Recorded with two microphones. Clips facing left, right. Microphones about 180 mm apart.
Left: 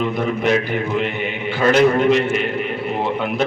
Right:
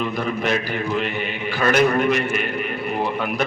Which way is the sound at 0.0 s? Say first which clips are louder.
Left 4 dB; 25° left (ahead or behind).